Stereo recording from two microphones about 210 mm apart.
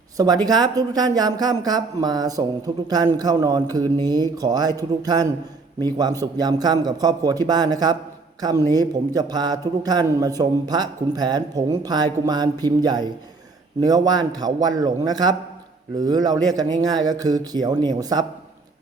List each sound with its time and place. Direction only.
0.2 s a man's voice: 20° right (ahead or behind)